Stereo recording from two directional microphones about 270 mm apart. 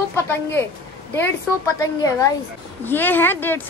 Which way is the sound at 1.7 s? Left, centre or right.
Centre.